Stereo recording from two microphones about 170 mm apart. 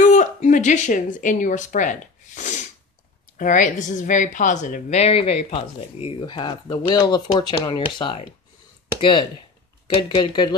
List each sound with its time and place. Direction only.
0.0 s speech: 45° left (ahead or behind); by 8.3 s 30° left (ahead or behind)
10.0 s speech: 25° left (ahead or behind)